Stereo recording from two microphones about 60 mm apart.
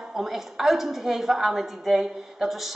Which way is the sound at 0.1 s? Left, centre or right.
Centre.